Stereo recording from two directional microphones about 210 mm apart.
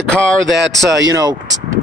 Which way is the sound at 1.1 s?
20° right (ahead or behind).